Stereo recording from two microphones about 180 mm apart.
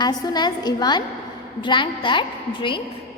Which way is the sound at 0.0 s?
25° left (ahead or behind).